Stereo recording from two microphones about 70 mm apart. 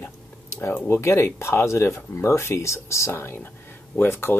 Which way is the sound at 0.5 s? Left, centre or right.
Left.